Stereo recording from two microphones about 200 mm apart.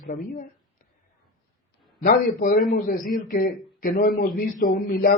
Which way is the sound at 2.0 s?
40° left (ahead or behind).